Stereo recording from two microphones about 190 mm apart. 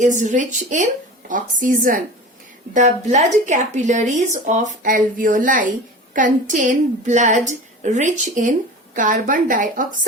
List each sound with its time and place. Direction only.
0.0 s speech: 40° right (ahead or behind)